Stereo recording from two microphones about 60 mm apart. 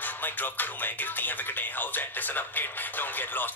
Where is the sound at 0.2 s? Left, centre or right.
Left.